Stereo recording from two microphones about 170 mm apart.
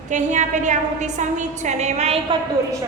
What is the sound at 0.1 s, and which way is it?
A woman's voice, 45° right (ahead or behind).